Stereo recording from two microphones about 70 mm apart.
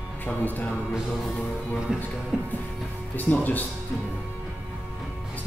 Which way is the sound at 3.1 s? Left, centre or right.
Left.